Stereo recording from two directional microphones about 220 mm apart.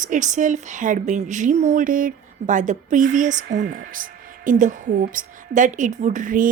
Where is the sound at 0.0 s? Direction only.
35° right (ahead or behind).